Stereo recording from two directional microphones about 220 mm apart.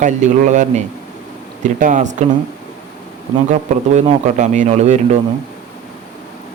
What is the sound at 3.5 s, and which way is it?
Speech, 30° right (ahead or behind).